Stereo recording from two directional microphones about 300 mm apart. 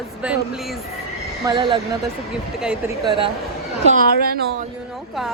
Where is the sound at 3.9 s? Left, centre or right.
Right.